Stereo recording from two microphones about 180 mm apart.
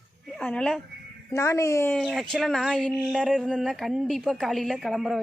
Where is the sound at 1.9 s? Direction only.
Centre (ahead or behind).